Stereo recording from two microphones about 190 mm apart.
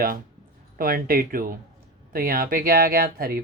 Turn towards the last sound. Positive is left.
turn(degrees=-50)  # may be behind; listen again after turning